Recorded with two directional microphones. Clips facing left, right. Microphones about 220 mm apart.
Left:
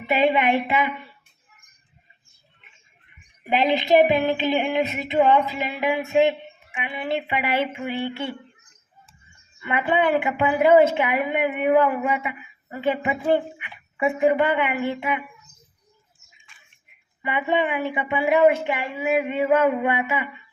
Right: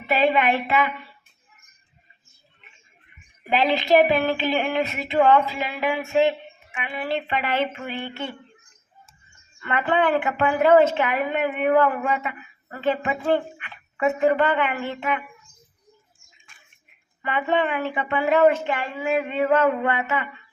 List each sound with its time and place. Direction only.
0.1 s a woman's voice: 15° left (ahead or behind)
3.5 s a woman's voice: 20° left (ahead or behind)
9.6 s a woman's voice: 10° left (ahead or behind)
16.5 s a sound: 45° right (ahead or behind)
17.2 s a woman's voice: 15° left (ahead or behind)